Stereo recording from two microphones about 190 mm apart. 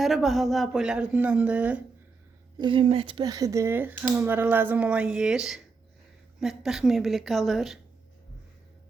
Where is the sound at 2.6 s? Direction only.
25° right (ahead or behind); by 7.8 s centre (ahead or behind).